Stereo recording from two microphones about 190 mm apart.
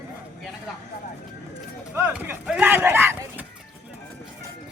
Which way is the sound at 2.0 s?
10° right (ahead or behind).